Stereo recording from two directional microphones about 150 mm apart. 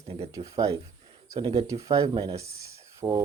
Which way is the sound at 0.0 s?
45° right (ahead or behind).